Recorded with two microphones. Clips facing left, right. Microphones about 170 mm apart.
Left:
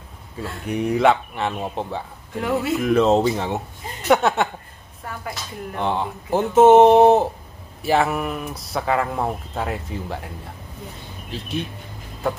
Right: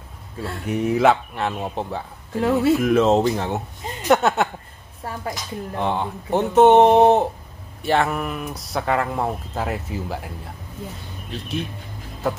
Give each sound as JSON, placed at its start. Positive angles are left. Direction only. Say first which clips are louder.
{"t": 0.4, "sound": "speech", "louder": "right 1 dB", "side_deg": -5}
{"t": 5.0, "sound": "speech", "louder": "right 3 dB", "side_deg": -30}
{"t": 5.8, "sound": "speech", "louder": "even", "side_deg": 0}